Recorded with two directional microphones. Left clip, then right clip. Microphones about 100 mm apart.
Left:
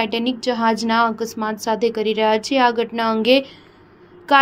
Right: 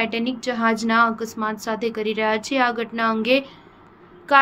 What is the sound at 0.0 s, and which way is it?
A woman's voice, 35° left (ahead or behind).